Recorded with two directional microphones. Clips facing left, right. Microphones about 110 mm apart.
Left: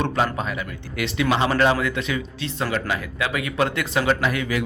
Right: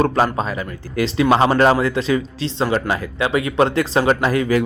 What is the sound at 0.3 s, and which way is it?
Speech, 35° right (ahead or behind).